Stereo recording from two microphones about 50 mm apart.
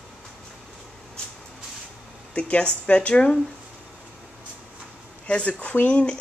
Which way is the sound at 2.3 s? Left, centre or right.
Left.